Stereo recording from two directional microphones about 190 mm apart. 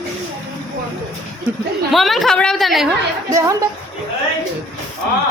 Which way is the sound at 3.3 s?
15° right (ahead or behind).